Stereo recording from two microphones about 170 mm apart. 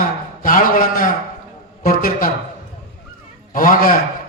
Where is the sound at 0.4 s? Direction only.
55° left (ahead or behind).